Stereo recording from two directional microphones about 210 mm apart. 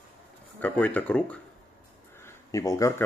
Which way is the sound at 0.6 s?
10° left (ahead or behind).